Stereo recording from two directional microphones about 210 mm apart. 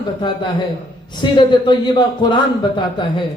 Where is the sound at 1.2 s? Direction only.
20° left (ahead or behind).